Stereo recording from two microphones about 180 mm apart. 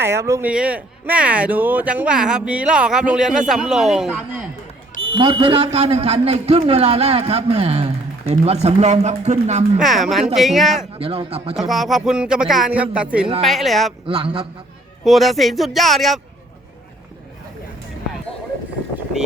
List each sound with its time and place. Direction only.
0.0 s speech: 15° right (ahead or behind)
5.1 s a man's voice: 25° right (ahead or behind)
9.7 s speech: centre (ahead or behind)
10.9 s a man's voice: 30° right (ahead or behind)
11.5 s speech: centre (ahead or behind)
14.1 s a man's voice: 30° right (ahead or behind)
15.0 s speech: centre (ahead or behind)